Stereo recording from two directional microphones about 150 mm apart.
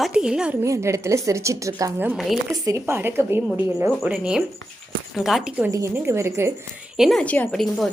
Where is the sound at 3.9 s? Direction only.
5° right (ahead or behind).